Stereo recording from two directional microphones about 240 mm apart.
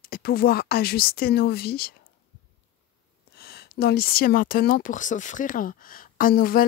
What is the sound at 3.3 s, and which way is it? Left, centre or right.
Speech, left.